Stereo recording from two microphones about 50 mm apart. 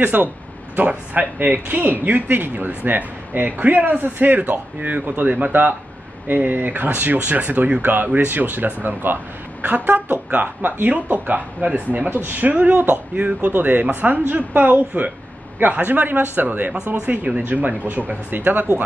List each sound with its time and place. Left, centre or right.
0.0 s speech: right
16.7 s speech: right